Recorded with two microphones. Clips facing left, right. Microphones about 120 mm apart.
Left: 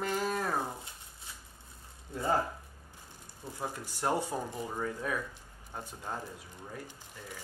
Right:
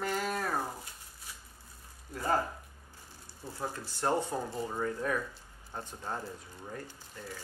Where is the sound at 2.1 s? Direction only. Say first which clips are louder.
Even; 25° left (ahead or behind).